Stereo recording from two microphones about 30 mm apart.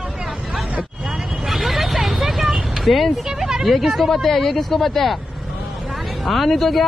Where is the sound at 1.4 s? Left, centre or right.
Centre.